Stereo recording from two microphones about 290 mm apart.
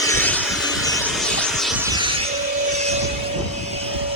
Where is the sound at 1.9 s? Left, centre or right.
Centre.